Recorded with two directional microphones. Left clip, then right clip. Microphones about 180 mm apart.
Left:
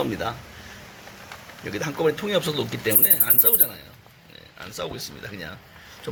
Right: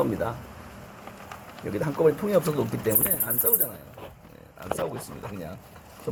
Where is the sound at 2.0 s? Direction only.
5° right (ahead or behind).